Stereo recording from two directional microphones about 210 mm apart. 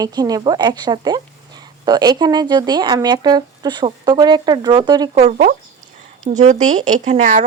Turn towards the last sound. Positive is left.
turn(degrees=-35)  # may be behind; listen again after turning